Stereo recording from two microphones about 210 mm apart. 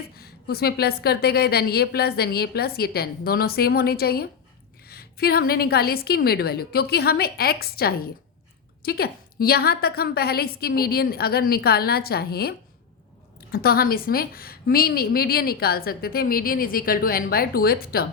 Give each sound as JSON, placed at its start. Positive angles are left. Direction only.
{"t": 0.2, "sound": "a woman's voice", "side_deg": 45}